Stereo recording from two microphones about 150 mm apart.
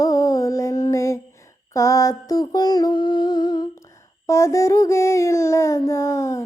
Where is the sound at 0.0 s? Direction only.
20° left (ahead or behind).